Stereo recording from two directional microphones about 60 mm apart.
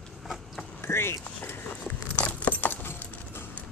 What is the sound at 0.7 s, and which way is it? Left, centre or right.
Speech, left.